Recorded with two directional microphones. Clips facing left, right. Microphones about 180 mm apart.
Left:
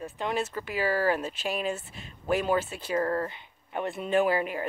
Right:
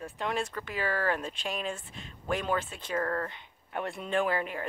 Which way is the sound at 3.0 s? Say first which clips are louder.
Left 3 dB; 25° left (ahead or behind).